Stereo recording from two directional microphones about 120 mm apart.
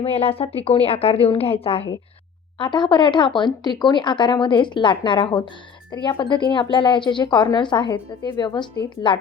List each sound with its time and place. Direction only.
0.0 s a woman's voice: 55° left (ahead or behind)
2.6 s a woman's voice: 40° left (ahead or behind)